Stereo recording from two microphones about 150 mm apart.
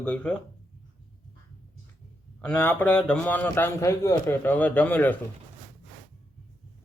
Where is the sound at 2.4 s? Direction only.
10° left (ahead or behind).